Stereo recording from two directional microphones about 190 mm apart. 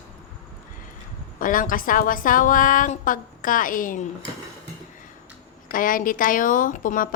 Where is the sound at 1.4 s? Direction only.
45° left (ahead or behind).